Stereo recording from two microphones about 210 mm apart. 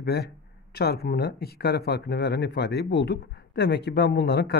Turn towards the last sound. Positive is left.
turn(degrees=50)  # may be behind; listen again after turning